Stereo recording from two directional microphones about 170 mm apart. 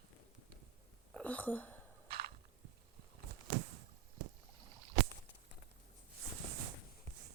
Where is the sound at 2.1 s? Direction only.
65° right (ahead or behind).